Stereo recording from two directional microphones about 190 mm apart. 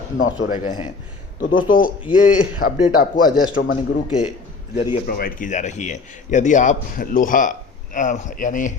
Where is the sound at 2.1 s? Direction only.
45° left (ahead or behind).